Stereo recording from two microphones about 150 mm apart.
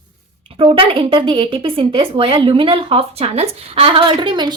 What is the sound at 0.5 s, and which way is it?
A woman's voice, 35° right (ahead or behind).